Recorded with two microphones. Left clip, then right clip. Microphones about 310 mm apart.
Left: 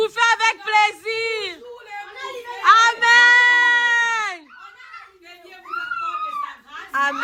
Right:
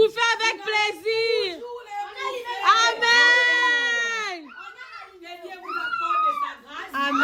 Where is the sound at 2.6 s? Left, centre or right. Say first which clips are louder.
Left 5 dB; centre.